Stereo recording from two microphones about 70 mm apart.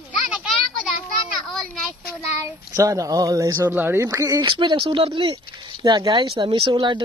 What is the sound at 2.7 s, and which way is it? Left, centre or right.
Speech, right.